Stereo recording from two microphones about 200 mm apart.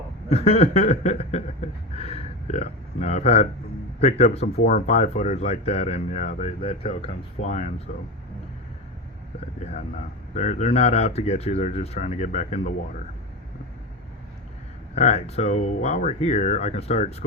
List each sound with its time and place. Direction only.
0.3 s speech: 30° left (ahead or behind)
10.3 s speech: 35° left (ahead or behind)
14.9 s speech: 30° left (ahead or behind)